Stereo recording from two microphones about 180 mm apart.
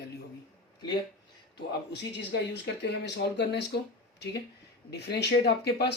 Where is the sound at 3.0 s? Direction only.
75° left (ahead or behind).